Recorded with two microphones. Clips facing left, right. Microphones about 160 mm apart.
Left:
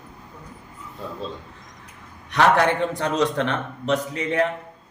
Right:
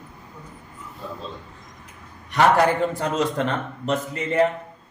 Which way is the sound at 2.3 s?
5° right (ahead or behind).